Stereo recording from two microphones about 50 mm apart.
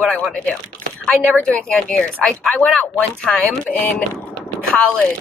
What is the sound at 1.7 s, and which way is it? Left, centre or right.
Speech, left.